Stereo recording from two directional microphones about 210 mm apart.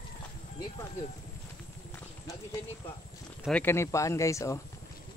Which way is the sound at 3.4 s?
10° left (ahead or behind).